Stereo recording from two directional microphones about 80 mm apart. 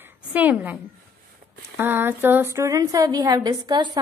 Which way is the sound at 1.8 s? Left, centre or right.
Right.